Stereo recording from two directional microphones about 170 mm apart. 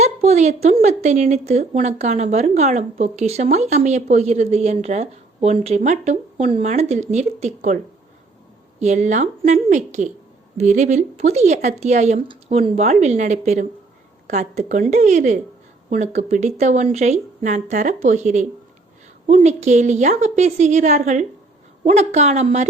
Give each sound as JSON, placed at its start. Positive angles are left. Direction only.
{"t": 0.0, "sound": "a woman's voice", "side_deg": -40}
{"t": 8.8, "sound": "speech", "side_deg": -45}